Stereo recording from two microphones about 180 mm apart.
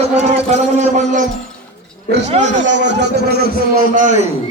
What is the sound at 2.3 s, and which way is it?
Speech, 40° right (ahead or behind).